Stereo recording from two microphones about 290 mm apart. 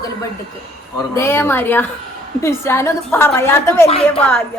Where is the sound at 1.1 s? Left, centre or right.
Centre.